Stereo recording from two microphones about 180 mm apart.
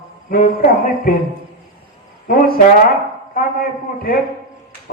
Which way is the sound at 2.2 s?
55° left (ahead or behind).